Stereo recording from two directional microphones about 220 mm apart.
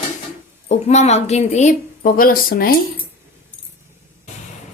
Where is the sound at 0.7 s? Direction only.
30° left (ahead or behind).